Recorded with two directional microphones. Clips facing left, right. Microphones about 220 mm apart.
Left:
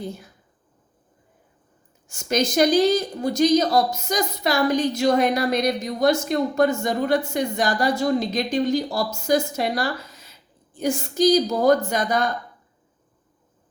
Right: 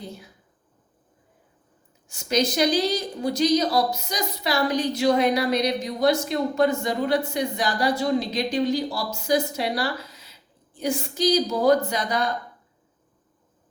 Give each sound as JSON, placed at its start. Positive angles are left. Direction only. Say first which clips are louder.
{"t": 2.0, "sound": "a woman's voice", "louder": "left 1 dB", "side_deg": 45}